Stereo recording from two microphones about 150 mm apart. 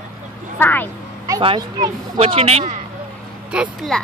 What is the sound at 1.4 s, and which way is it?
Speech, 30° right (ahead or behind).